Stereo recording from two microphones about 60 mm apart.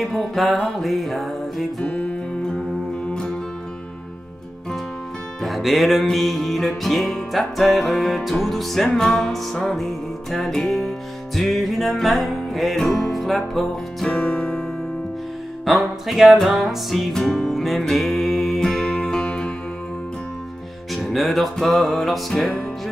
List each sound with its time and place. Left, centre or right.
0.0 s music: centre
1.9 s music: left
5.4 s music: centre
14.0 s music: centre
15.6 s music: centre
20.9 s music: centre